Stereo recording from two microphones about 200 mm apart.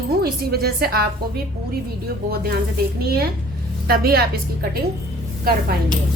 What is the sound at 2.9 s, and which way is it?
A woman's voice, 50° right (ahead or behind).